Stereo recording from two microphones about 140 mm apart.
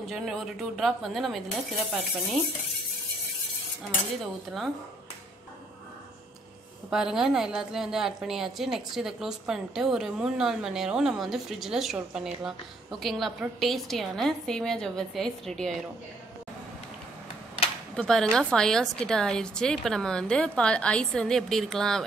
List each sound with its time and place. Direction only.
0.1 s a woman's voice: centre (ahead or behind)
6.9 s a woman's voice: 5° right (ahead or behind)
17.9 s a woman's voice: 5° left (ahead or behind)